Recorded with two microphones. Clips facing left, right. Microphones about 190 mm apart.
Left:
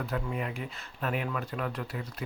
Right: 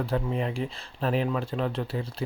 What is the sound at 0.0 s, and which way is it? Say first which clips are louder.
Speech: right 5 dB; 30° right (ahead or behind).